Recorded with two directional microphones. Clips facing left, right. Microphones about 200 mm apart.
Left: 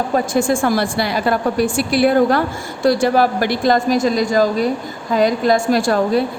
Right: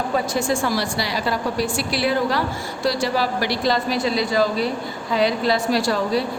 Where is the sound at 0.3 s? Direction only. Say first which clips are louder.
Left 8 dB; 50° left (ahead or behind).